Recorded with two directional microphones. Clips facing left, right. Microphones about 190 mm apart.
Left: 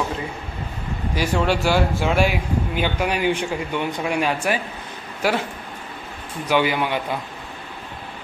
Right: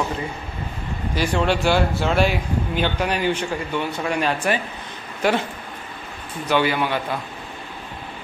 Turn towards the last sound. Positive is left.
turn(degrees=15)  # may be behind; listen again after turning